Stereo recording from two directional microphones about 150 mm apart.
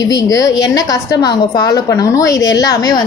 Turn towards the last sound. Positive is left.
turn(degrees=25)  # may be behind; listen again after turning